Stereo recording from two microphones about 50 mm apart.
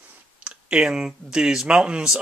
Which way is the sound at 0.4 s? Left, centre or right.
Right.